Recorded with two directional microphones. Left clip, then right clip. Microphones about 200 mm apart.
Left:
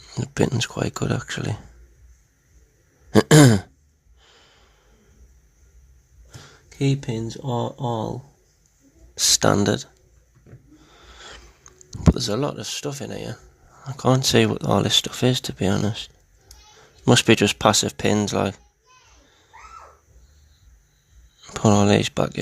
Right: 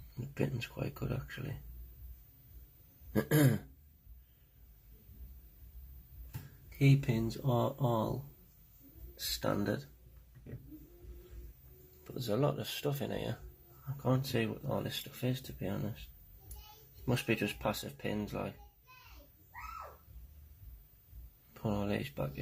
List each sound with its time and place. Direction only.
0.3 s speech: 60° left (ahead or behind)
3.1 s throat clearing: 60° left (ahead or behind)
6.7 s speech: 50° left (ahead or behind)
9.1 s speech: 65° left (ahead or behind)
12.1 s speech: 40° left (ahead or behind)
13.9 s speech: 60° left (ahead or behind)
17.1 s speech: 70° left (ahead or behind)
21.5 s speech: 70° left (ahead or behind)